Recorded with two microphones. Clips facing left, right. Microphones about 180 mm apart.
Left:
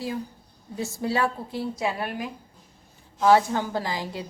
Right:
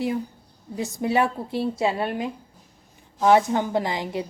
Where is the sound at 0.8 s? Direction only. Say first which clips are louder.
Right 3 dB; 20° right (ahead or behind).